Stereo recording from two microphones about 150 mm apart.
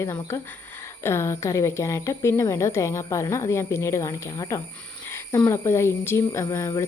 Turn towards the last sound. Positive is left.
turn(degrees=20)  # may be behind; listen again after turning